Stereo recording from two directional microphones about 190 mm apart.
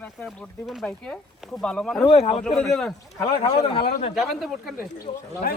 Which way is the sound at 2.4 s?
Centre (ahead or behind).